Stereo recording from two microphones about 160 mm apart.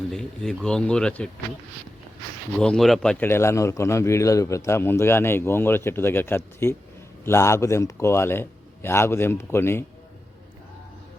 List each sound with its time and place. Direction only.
0.1 s speech: 5° left (ahead or behind)
2.6 s a man's voice: 5° left (ahead or behind)